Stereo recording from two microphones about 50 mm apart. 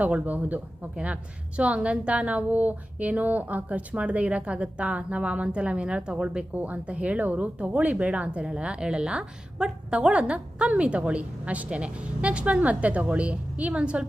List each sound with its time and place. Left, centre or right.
0.0 s speech: right
0.9 s speech: right
6.5 s speech: right